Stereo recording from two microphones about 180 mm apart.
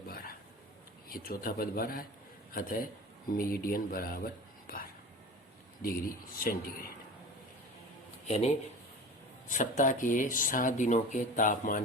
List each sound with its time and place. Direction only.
0.1 s a sound: 55° left (ahead or behind)
1.1 s a man's voice: 55° left (ahead or behind)
8.3 s speech: 40° left (ahead or behind)